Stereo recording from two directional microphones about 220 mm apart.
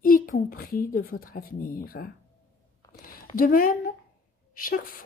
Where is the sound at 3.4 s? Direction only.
40° left (ahead or behind).